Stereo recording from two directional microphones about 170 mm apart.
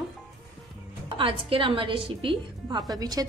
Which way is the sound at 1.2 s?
30° right (ahead or behind).